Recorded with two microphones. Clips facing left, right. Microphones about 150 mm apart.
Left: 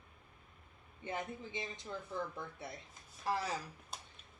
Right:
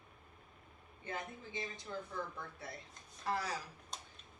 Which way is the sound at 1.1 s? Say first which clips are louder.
Left 3 dB; 20° left (ahead or behind).